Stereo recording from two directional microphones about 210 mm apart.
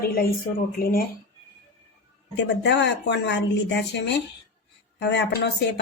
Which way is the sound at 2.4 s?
55° left (ahead or behind).